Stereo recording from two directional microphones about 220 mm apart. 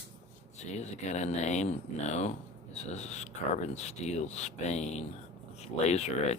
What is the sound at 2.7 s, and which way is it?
Speech, 30° left (ahead or behind).